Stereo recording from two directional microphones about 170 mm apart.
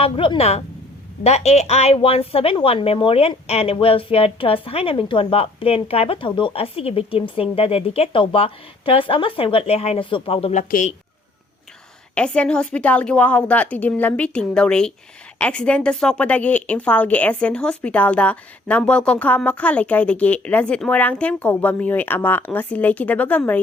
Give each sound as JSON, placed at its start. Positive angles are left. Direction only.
{"t": 0.0, "sound": "a woman's voice", "side_deg": 35}
{"t": 10.6, "sound": "speech", "side_deg": 50}
{"t": 12.1, "sound": "a woman's voice", "side_deg": 5}